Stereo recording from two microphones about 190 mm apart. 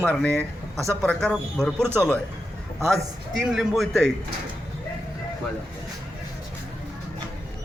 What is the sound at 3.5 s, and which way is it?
Speech, centre (ahead or behind).